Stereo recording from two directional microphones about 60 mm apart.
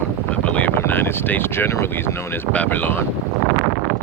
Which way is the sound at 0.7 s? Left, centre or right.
Left.